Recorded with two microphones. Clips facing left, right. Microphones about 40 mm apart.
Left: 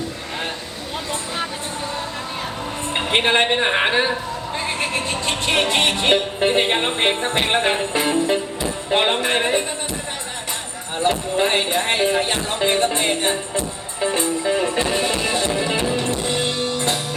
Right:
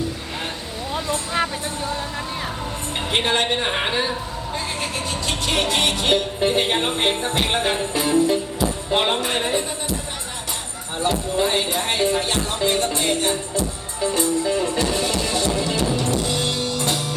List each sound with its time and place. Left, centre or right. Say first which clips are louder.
2.9 s a woman's voice: left 3 dB; left
4.6 s music: left 6 dB; left
8.9 s speech: left 4 dB; left
10.9 s speech: left 2 dB; left
11.6 s music: left 2 dB; left